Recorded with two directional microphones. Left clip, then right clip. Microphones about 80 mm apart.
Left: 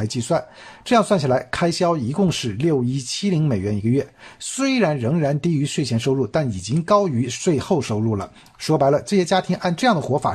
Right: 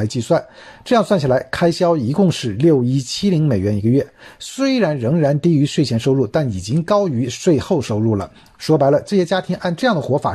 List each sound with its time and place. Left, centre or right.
0.0 s speech: right
0.8 s speech: right
5.9 s speech: right
7.1 s speech: right
7.5 s speech: right